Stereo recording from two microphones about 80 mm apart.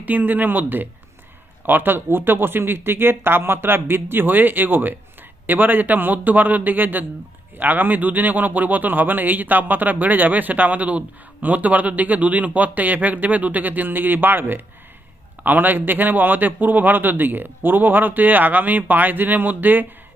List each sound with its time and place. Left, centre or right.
0.0 s a man's voice: right